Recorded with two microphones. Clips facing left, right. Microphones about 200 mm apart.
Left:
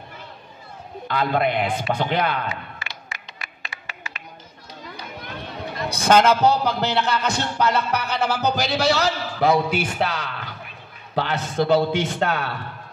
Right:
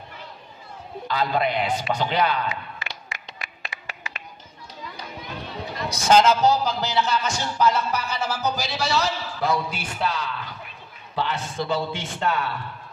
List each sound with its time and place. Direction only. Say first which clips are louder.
1.0 s a man's voice: left 2 dB; 55° left (ahead or behind)
3.3 s a sound: right 1 dB; 20° right (ahead or behind)
5.9 s a man's voice: left 1 dB; 60° left (ahead or behind)